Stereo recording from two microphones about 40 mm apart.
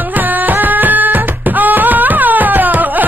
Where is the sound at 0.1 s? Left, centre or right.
Right.